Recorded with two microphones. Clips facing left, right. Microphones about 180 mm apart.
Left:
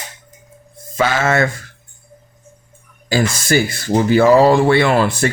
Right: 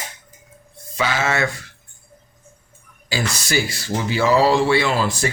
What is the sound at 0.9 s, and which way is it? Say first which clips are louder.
Speech: left 5 dB; 50° left (ahead or behind).